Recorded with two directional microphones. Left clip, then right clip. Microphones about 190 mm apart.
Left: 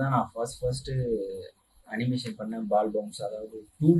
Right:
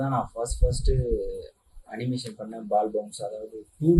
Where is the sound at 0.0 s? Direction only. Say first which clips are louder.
Even; 15° right (ahead or behind).